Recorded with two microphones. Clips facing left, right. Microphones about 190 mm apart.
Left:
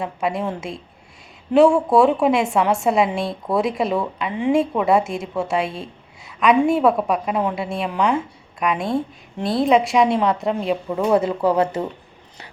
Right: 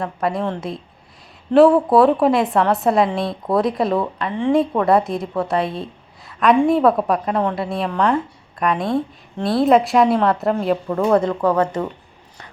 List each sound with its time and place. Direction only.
0.0 s a woman's voice: centre (ahead or behind)